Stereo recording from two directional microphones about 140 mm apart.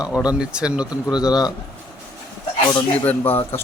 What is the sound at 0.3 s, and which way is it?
Speech, 5° right (ahead or behind).